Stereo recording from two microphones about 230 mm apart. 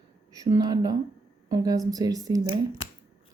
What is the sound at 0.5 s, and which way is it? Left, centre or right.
Speech, centre.